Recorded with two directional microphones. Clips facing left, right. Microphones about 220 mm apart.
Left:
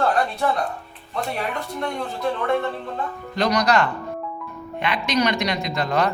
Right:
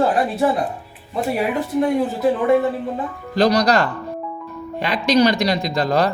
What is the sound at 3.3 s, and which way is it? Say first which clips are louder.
Speech: right 4 dB; 35° right (ahead or behind).